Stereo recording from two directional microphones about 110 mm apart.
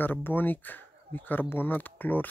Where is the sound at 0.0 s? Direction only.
20° left (ahead or behind).